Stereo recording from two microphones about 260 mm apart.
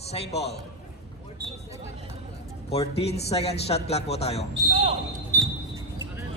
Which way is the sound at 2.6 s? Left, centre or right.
Left.